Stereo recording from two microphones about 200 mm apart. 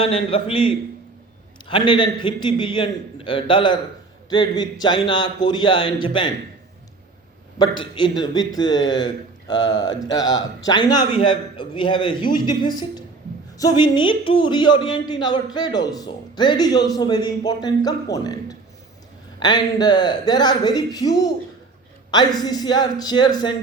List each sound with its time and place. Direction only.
0.0 s a man's voice: 25° left (ahead or behind)
7.9 s a man's voice: 20° left (ahead or behind)